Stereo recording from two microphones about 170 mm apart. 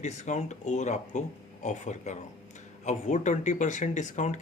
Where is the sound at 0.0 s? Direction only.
45° left (ahead or behind).